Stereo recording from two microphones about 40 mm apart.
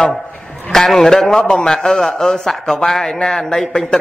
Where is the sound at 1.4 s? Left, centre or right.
Left.